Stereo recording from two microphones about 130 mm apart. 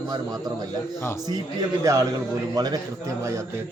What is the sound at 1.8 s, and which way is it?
Speech, 25° right (ahead or behind).